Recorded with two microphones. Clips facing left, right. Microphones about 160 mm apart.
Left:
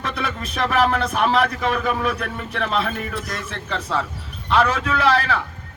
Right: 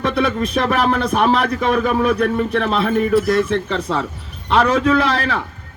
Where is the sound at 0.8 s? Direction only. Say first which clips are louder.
Left 2 dB; 45° right (ahead or behind).